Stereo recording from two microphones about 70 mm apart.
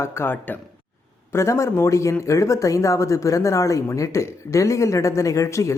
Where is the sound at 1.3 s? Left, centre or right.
Left.